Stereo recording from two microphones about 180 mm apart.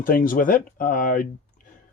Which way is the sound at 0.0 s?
50° left (ahead or behind).